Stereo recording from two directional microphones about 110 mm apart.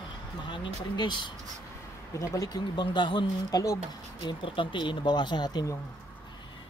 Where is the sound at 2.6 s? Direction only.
45° left (ahead or behind).